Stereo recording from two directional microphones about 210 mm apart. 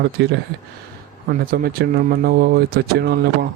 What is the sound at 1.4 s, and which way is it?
Speech, 45° right (ahead or behind).